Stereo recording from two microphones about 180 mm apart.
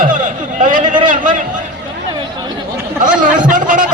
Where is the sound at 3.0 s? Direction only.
45° right (ahead or behind).